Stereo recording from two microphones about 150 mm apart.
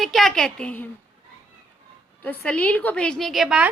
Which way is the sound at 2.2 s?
10° left (ahead or behind).